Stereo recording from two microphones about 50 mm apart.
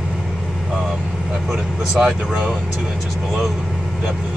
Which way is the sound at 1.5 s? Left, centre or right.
Centre.